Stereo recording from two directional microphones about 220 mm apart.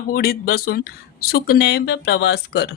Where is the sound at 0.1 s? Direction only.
45° left (ahead or behind).